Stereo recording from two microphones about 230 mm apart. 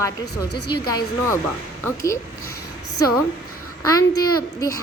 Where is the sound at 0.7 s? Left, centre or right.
Centre.